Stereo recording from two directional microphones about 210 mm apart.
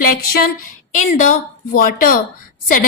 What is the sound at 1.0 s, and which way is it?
A woman's voice, 35° left (ahead or behind).